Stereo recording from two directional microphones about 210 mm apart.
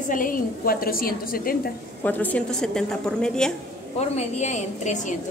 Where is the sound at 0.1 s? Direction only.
40° left (ahead or behind).